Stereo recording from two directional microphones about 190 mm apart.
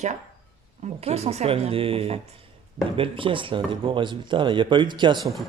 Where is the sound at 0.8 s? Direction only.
35° right (ahead or behind).